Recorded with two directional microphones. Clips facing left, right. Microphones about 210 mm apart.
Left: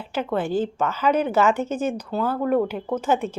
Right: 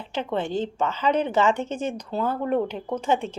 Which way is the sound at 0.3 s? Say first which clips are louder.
Left 3 dB; 5° left (ahead or behind).